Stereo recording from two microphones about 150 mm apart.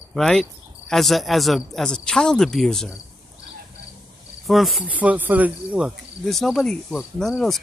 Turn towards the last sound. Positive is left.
turn(degrees=0)  # may be behind; listen again after turning